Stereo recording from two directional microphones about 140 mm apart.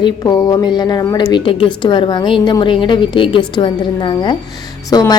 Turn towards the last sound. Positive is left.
turn(degrees=30)  # may be behind; listen again after turning